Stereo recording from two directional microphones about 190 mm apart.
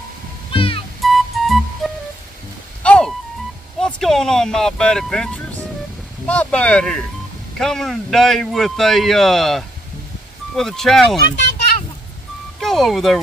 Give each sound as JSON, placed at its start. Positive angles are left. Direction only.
{"t": 0.5, "sound": "music", "side_deg": 30}
{"t": 1.0, "sound": "music", "side_deg": 0}
{"t": 6.2, "sound": "a man's voice", "side_deg": 5}
{"t": 12.5, "sound": "speech", "side_deg": 0}